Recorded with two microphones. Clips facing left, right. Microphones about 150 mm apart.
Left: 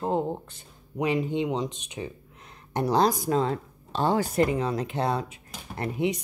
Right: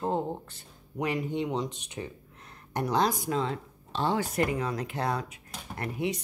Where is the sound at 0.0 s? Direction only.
15° left (ahead or behind).